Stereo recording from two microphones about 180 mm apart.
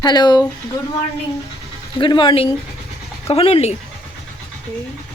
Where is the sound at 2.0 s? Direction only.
25° left (ahead or behind).